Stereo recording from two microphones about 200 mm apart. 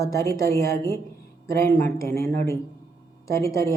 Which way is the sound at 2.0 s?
15° left (ahead or behind).